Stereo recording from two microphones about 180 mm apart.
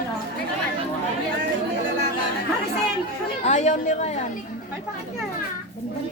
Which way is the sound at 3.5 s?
40° left (ahead or behind).